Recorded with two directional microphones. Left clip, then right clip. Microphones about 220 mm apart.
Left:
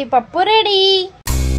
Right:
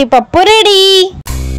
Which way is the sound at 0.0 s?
40° right (ahead or behind).